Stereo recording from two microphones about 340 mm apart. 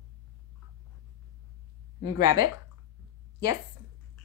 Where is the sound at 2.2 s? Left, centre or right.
Centre.